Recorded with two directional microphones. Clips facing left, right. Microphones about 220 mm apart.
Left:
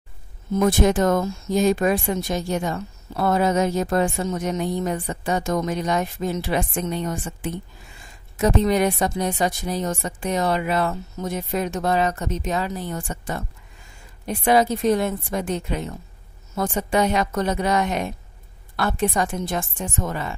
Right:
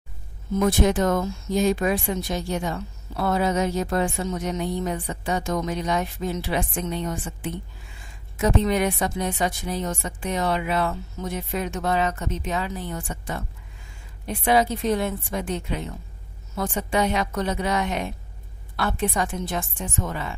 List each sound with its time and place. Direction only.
0.6 s speech: 45° left (ahead or behind)